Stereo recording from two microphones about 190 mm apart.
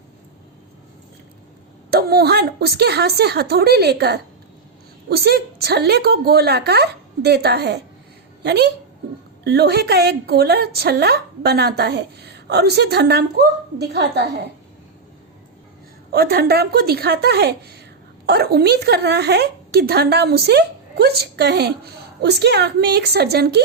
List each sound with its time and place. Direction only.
1.9 s speech: 55° right (ahead or behind)
16.1 s speech: 55° right (ahead or behind)